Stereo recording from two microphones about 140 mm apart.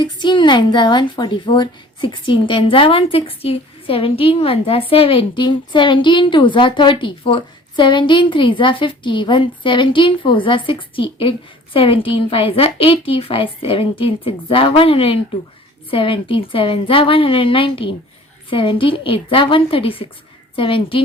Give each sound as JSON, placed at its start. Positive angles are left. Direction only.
{"t": 0.0, "sound": "speech", "side_deg": 35}